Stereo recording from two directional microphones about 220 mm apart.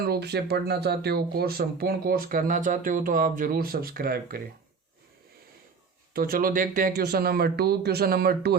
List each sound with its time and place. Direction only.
0.0 s speech: 45° right (ahead or behind)
6.1 s speech: 40° right (ahead or behind)